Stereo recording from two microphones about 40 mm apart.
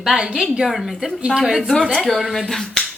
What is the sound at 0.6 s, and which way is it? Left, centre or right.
A woman's voice, centre.